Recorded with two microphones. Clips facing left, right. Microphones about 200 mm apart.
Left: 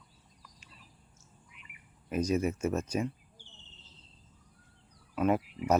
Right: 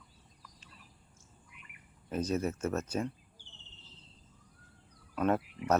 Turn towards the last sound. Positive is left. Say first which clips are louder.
# left 2 dB
turn(degrees=10)  # may be behind; listen again after turning